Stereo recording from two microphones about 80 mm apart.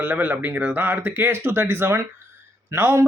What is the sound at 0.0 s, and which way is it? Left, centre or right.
Speech, right.